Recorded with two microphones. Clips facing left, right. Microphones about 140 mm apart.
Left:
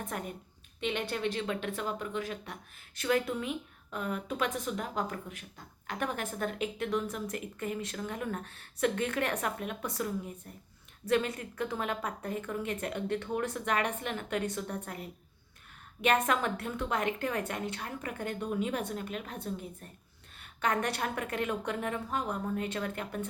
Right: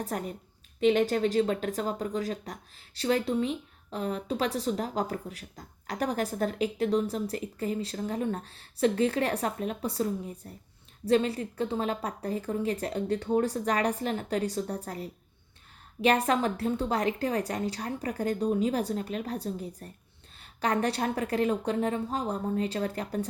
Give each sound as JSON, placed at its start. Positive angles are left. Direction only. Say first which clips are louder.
{"t": 0.0, "sound": "speech", "louder": "right 5 dB", "side_deg": -35}